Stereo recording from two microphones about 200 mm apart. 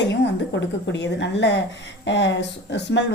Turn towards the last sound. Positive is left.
turn(degrees=60)  # may be behind; listen again after turning